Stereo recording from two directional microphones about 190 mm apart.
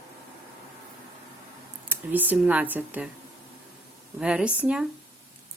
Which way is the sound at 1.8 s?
10° right (ahead or behind).